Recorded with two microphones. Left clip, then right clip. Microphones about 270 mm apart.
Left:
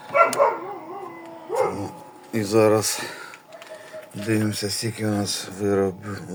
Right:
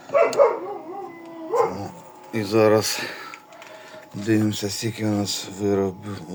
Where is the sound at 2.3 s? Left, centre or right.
Centre.